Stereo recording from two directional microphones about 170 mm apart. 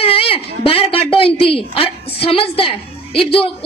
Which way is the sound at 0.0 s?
35° left (ahead or behind).